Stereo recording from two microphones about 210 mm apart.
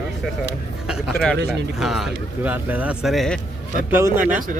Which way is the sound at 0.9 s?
5° right (ahead or behind).